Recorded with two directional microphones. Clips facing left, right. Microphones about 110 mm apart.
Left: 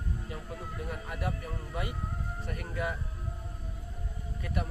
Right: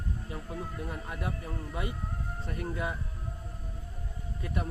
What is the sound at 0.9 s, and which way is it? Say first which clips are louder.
A man's voice: left 1 dB; 25° right (ahead or behind).